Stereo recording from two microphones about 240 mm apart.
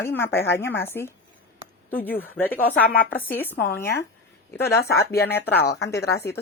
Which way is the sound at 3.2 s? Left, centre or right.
Centre.